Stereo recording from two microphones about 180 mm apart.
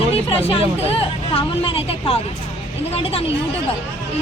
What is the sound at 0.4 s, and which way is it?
Speech, 30° left (ahead or behind).